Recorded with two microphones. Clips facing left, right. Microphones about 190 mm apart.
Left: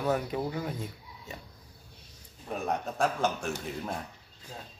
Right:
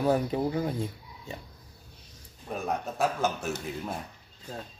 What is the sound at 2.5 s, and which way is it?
A man's voice, centre (ahead or behind).